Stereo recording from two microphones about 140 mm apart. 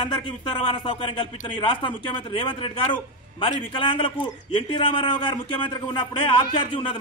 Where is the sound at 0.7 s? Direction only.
35° left (ahead or behind).